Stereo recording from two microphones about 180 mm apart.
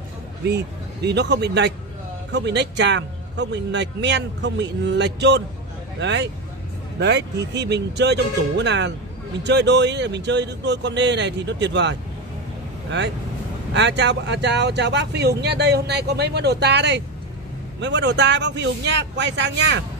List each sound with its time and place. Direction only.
0.5 s speech: 70° right (ahead or behind)